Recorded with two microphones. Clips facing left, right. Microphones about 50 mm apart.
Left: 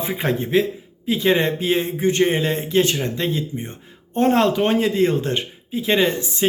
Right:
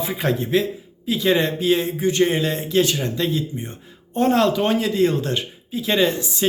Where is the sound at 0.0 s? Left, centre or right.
Left.